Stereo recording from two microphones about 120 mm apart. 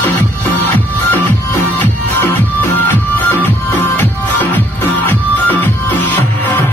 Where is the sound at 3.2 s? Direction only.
20° left (ahead or behind).